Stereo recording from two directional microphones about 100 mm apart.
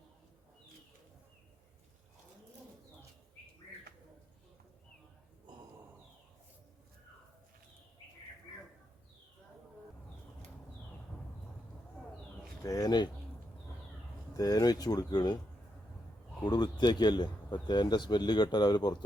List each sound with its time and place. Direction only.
12.6 s speech: 40° left (ahead or behind)
14.3 s speech: 40° left (ahead or behind)
16.4 s a man's voice: 45° left (ahead or behind)